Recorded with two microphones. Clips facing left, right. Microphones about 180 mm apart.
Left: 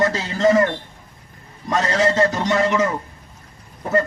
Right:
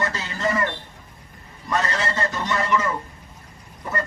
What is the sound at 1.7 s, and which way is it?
Speech, 45° left (ahead or behind).